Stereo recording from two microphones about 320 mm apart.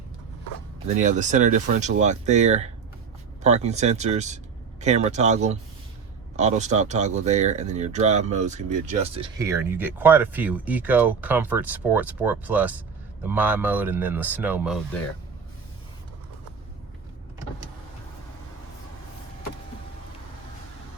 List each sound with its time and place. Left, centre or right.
1.0 s speech: right
9.4 s speech: centre